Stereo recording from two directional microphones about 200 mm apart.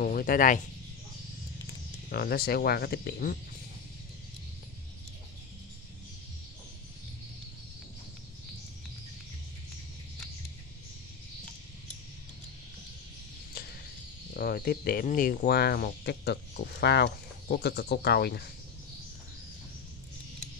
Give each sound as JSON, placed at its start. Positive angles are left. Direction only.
{"t": 0.0, "sound": "speech", "side_deg": 45}
{"t": 2.0, "sound": "speech", "side_deg": 50}
{"t": 14.3, "sound": "speech", "side_deg": 50}